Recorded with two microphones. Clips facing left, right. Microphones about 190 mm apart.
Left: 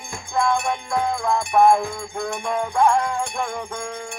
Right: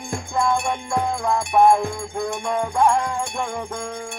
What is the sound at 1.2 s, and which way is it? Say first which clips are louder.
Music: even; 10° right (ahead or behind).